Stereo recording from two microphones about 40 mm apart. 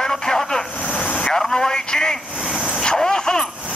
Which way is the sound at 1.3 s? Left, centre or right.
Centre.